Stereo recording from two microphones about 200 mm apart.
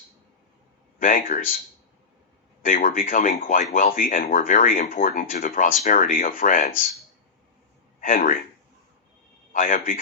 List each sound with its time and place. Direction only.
0.9 s speech: 45° left (ahead or behind)
2.6 s speech: 45° left (ahead or behind)
8.0 s a man's voice: 45° left (ahead or behind)
9.5 s a man's voice: 45° left (ahead or behind)